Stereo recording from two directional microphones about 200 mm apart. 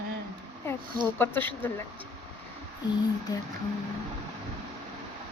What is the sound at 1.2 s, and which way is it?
Speech, 10° left (ahead or behind).